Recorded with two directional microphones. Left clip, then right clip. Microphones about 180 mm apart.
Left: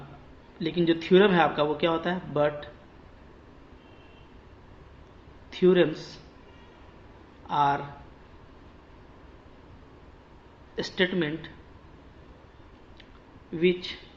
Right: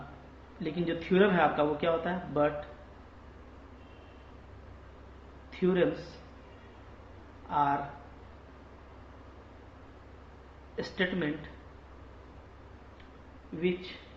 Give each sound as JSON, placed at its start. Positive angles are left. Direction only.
{"t": 0.6, "sound": "speech", "side_deg": 50}
{"t": 5.5, "sound": "speech", "side_deg": 45}
{"t": 7.5, "sound": "speech", "side_deg": 45}
{"t": 10.8, "sound": "speech", "side_deg": 50}